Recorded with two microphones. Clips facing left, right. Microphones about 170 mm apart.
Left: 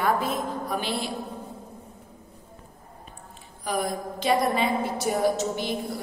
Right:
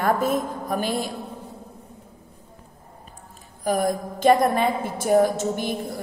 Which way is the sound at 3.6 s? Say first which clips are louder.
Right 5 dB; 45° right (ahead or behind).